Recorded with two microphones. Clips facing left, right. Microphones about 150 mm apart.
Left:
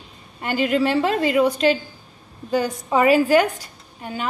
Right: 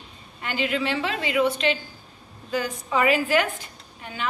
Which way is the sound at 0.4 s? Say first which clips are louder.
Left 6 dB; 45° left (ahead or behind).